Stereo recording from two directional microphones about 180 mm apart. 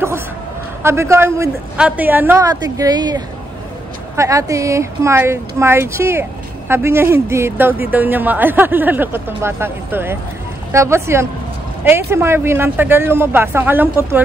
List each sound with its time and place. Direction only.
0.8 s speech: 15° right (ahead or behind)
4.2 s speech: 15° right (ahead or behind)